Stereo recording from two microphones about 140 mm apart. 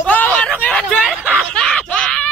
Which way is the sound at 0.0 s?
10° left (ahead or behind).